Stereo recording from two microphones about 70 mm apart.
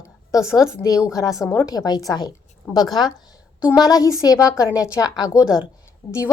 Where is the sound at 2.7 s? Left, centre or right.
Left.